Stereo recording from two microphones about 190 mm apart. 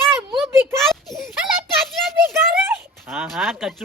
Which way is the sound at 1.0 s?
Centre (ahead or behind).